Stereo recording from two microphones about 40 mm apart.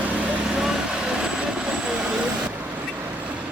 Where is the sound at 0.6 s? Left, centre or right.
Centre.